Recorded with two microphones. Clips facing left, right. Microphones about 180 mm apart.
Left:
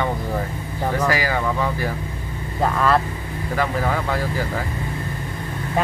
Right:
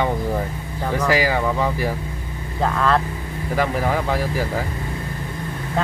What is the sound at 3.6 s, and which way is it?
Speech, 15° right (ahead or behind).